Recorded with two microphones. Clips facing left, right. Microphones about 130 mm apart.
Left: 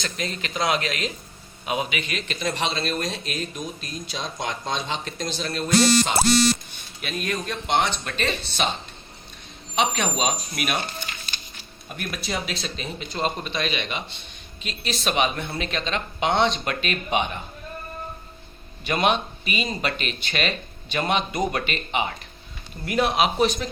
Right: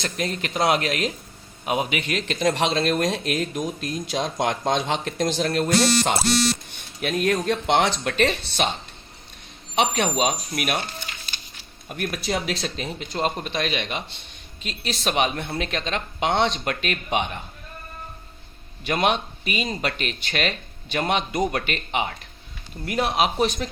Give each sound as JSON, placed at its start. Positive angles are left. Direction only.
{"t": 0.0, "sound": "speech", "side_deg": -55}
{"t": 11.9, "sound": "speech", "side_deg": -55}
{"t": 18.9, "sound": "speech", "side_deg": -60}
{"t": 22.9, "sound": "speech", "side_deg": -40}